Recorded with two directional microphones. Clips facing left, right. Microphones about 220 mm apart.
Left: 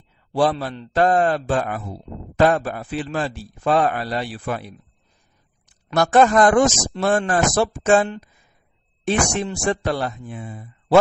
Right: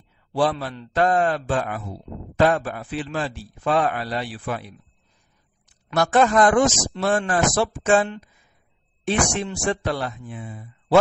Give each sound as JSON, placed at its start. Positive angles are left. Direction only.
{"t": 0.3, "sound": "a man's voice", "side_deg": 40}
{"t": 5.9, "sound": "speech", "side_deg": 45}